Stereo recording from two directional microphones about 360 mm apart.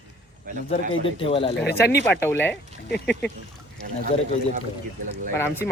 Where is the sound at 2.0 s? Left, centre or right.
Centre.